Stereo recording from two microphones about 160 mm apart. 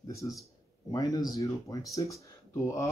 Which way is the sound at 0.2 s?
25° left (ahead or behind).